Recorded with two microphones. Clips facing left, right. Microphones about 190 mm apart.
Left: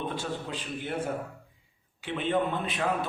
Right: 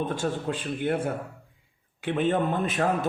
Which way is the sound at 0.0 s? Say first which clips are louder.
Right 5 dB; 45° right (ahead or behind).